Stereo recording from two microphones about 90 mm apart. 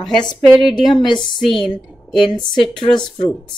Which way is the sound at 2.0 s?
60° left (ahead or behind).